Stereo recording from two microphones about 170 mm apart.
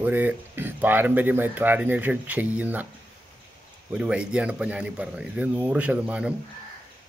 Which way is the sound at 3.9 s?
5° right (ahead or behind).